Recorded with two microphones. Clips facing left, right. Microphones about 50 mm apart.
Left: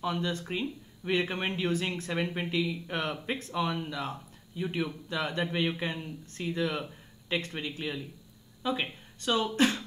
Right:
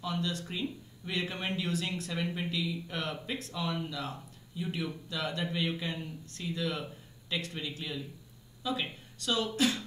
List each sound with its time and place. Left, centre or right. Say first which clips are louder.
0.0 s speech: left 3 dB; left